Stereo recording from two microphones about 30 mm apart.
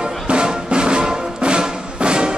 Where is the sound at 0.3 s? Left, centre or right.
Right.